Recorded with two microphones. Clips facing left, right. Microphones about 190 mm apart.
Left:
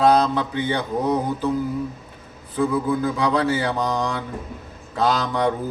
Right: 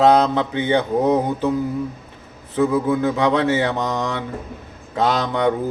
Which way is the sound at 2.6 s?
20° right (ahead or behind).